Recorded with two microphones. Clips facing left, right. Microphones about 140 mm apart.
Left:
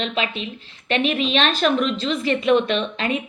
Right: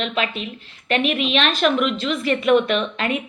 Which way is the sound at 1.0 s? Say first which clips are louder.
Left 1 dB; 35° left (ahead or behind).